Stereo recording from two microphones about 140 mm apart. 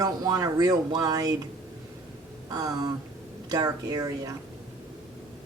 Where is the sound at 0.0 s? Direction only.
25° right (ahead or behind).